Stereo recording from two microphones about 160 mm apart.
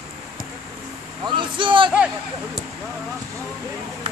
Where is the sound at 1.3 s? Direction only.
30° right (ahead or behind).